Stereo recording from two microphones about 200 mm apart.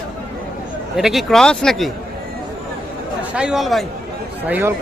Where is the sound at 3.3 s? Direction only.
5° right (ahead or behind).